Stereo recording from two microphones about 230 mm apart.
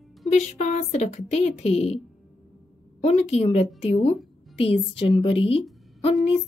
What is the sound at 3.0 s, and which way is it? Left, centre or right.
Speech, left.